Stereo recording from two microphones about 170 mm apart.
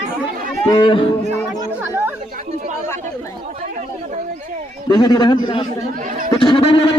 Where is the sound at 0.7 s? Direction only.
30° left (ahead or behind).